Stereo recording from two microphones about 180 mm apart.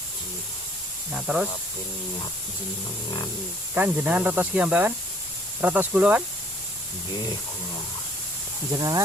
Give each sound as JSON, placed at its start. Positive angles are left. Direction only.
{"t": 1.1, "sound": "speech", "side_deg": -5}
{"t": 3.8, "sound": "speech", "side_deg": -10}
{"t": 8.7, "sound": "speech", "side_deg": -20}